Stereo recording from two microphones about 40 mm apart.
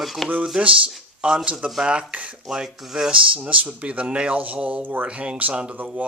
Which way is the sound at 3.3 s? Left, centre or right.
Right.